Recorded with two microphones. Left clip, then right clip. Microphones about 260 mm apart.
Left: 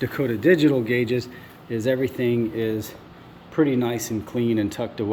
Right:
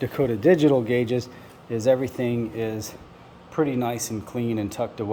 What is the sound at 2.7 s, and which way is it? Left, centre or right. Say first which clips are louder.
Speech: left 4 dB; right.